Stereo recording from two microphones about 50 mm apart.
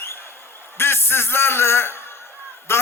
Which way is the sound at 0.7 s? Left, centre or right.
Left.